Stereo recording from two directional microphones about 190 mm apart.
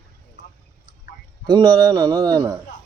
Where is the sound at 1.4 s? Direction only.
20° right (ahead or behind).